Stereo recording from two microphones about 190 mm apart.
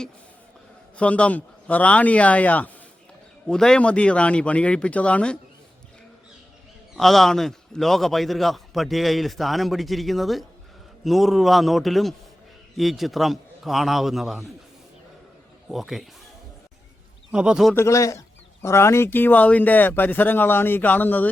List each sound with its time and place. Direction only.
0.9 s a man's voice: 5° left (ahead or behind)
6.9 s a man's voice: centre (ahead or behind)
15.7 s a man's voice: centre (ahead or behind)
17.3 s a man's voice: 5° right (ahead or behind)
17.7 s speech: 15° left (ahead or behind)